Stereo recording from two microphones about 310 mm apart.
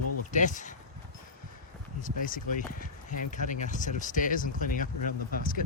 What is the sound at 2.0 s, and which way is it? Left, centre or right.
Speech, left.